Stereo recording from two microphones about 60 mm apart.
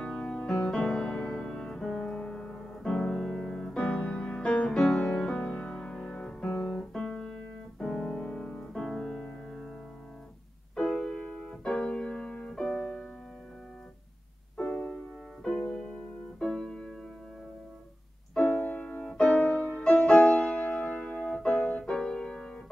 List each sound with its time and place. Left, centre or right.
0.2 s music: centre
5.4 s music: centre
6.5 s piano: centre
10.9 s music: centre
12.7 s music: left
14.7 s music: left
16.4 s music: centre
18.3 s music: centre
19.8 s music: centre
21.5 s music: centre